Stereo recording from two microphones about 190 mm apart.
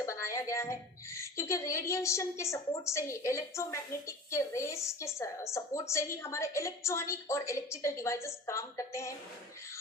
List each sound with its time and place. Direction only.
0.0 s a woman's voice: 15° left (ahead or behind)